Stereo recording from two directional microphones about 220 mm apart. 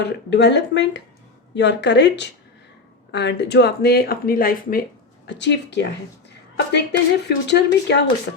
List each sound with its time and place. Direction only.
0.0 s speech: 50° left (ahead or behind)
5.2 s speech: 55° left (ahead or behind)